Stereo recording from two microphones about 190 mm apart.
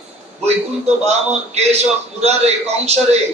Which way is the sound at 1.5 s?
35° right (ahead or behind).